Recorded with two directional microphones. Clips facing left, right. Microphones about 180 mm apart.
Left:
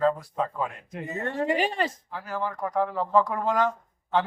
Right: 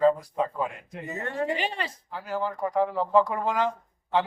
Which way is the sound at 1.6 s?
45° left (ahead or behind).